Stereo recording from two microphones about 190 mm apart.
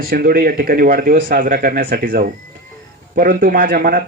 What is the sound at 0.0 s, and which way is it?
Speech, 50° right (ahead or behind).